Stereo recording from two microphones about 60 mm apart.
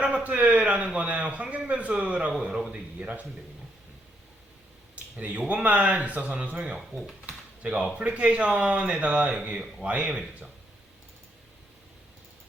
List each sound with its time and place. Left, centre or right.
0.0 s speech: right
2.5 s a man's voice: centre
5.1 s speech: right
6.7 s speech: centre
7.6 s speech: right